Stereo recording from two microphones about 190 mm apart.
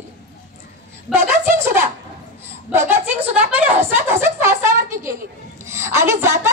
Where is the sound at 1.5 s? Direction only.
15° right (ahead or behind).